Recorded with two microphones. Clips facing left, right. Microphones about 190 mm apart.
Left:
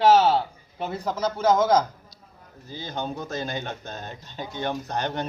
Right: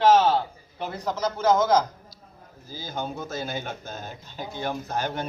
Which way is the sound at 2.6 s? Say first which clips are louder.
Left 1 dB; 5° right (ahead or behind).